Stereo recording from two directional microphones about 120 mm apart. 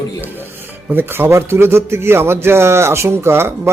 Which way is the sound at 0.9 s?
20° right (ahead or behind).